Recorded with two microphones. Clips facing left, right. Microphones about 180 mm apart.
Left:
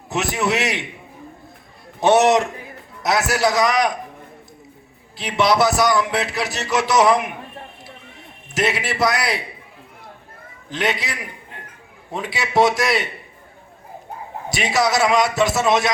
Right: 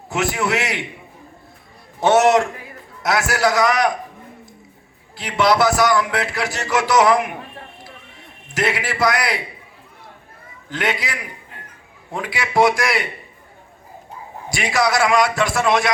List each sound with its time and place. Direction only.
0.1 s a man's voice: 20° left (ahead or behind)
2.0 s a man's voice: 20° left (ahead or behind)
5.1 s a man's voice: 20° left (ahead or behind)
8.5 s a man's voice: 20° left (ahead or behind)
10.7 s a man's voice: 20° left (ahead or behind)
12.1 s a man's voice: 25° left (ahead or behind)
14.5 s a man's voice: 25° left (ahead or behind)